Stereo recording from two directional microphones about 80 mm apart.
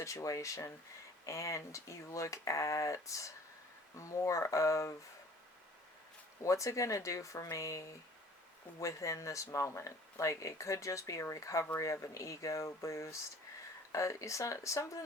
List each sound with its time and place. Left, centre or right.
0.0 s speech: left
6.4 s speech: left